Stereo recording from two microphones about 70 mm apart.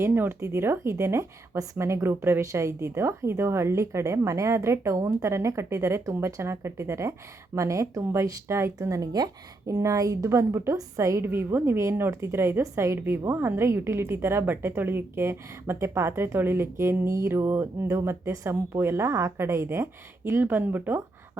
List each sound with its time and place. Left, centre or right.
0.0 s speech: right
9.7 s speech: right
11.2 s speech: right